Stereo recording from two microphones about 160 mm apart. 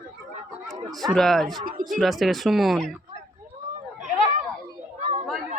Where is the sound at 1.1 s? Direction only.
Centre (ahead or behind).